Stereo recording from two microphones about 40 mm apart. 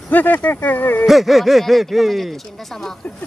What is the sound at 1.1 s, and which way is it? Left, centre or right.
Speech, centre.